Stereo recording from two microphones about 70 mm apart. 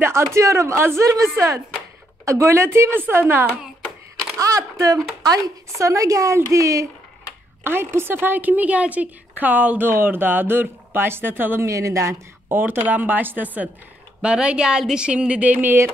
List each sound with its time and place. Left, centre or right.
0.0 s a woman's voice: right
1.0 s a woman's voice: right
4.4 s a sound: right
5.2 s a woman's voice: right
7.6 s a woman's voice: right
11.6 s a woman's voice: right
12.4 s a woman's voice: right
14.2 s a woman's voice: centre